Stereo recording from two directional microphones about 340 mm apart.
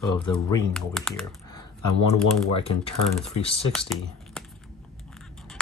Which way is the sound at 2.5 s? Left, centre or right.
Centre.